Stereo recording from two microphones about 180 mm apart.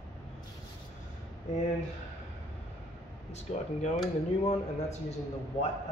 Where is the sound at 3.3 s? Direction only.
40° left (ahead or behind).